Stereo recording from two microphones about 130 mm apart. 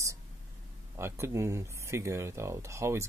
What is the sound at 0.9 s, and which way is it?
Speech, 20° right (ahead or behind).